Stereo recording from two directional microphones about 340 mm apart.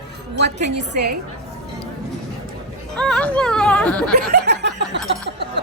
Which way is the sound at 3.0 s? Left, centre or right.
Centre.